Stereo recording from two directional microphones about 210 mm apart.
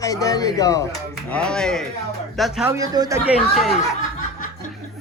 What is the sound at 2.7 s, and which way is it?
Speech, 15° right (ahead or behind).